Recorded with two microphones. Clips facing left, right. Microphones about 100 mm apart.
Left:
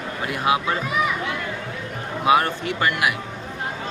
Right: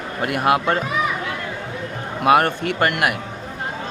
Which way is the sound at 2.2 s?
55° right (ahead or behind).